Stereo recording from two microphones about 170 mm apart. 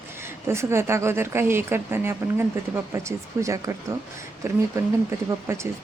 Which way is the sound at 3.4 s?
20° right (ahead or behind).